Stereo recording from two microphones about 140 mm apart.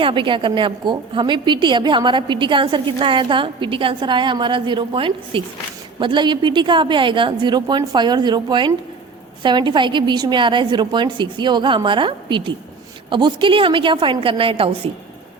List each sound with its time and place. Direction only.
0.0 s a woman's voice: 35° right (ahead or behind)